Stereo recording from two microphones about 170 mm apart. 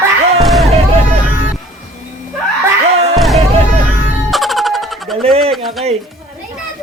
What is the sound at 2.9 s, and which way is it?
Music, 40° right (ahead or behind).